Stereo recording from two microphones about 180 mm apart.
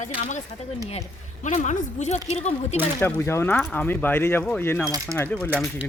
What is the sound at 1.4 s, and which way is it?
Speech, 45° left (ahead or behind).